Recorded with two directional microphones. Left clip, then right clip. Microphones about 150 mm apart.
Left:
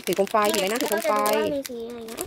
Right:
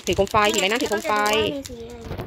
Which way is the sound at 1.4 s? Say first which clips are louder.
Right 1 dB; 35° left (ahead or behind).